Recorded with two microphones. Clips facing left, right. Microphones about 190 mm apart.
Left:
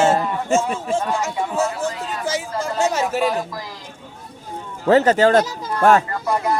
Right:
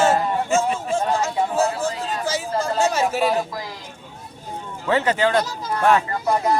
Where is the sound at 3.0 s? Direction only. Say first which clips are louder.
Even; 5° right (ahead or behind).